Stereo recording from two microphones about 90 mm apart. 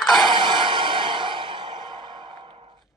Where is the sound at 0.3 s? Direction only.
60° right (ahead or behind).